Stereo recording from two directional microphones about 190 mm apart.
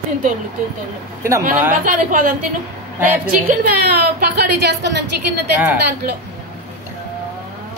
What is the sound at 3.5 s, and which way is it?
A woman's voice, 55° right (ahead or behind).